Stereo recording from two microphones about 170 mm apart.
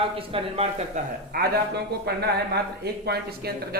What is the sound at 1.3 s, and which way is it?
Speech, 60° right (ahead or behind).